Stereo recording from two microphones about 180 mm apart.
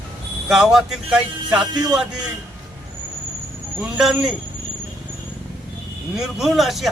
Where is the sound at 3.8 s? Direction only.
Centre (ahead or behind).